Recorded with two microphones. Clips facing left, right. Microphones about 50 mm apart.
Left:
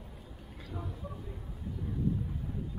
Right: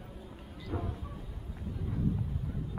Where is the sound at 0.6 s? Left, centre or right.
Right.